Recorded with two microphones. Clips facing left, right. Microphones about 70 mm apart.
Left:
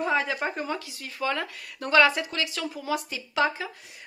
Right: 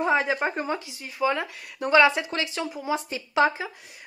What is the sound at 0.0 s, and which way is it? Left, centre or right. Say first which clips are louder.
Speech: right 3 dB; right.